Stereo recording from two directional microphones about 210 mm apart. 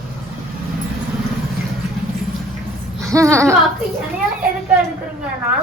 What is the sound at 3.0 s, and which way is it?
Speech, 15° right (ahead or behind).